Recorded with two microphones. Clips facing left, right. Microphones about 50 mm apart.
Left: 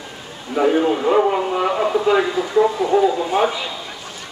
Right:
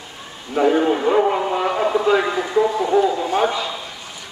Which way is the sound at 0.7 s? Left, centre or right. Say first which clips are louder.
Even; centre.